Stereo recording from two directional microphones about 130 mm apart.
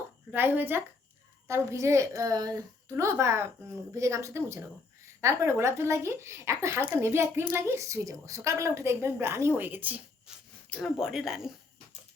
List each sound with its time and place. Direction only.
0.3 s a woman's voice: 15° right (ahead or behind)
10.7 s speech: centre (ahead or behind)